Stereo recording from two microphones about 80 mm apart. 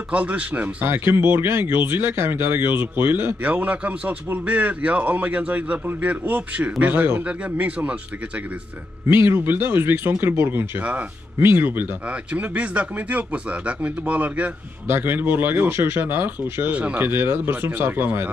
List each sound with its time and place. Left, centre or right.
0.1 s speech: centre
9.1 s speech: right